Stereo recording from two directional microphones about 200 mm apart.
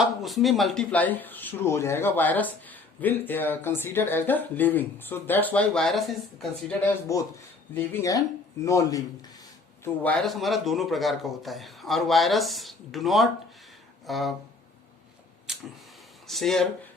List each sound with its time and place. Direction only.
0.0 s speech: centre (ahead or behind)
6.8 s a man's voice: 15° left (ahead or behind); by 14.3 s centre (ahead or behind)
15.5 s a sound: 5° right (ahead or behind)
16.2 s speech: centre (ahead or behind)